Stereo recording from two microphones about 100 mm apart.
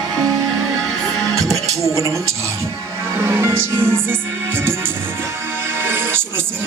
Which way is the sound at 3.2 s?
25° right (ahead or behind).